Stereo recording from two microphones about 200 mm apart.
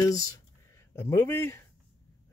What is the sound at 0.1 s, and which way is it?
Speech, 15° left (ahead or behind).